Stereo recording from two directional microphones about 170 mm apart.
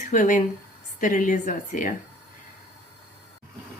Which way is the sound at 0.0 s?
50° left (ahead or behind).